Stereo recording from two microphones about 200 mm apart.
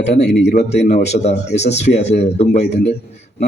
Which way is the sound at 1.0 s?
35° left (ahead or behind).